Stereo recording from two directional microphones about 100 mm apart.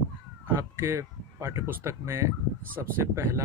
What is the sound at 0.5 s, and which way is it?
Speech, 25° right (ahead or behind).